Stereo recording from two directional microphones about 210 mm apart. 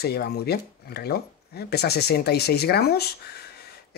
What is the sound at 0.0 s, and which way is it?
Speech, 50° left (ahead or behind).